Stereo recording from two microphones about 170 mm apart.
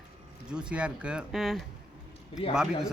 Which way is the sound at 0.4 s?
5° right (ahead or behind).